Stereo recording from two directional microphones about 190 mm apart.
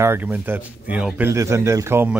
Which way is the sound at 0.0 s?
10° right (ahead or behind).